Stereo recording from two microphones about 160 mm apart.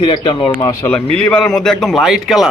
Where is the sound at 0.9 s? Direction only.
10° left (ahead or behind).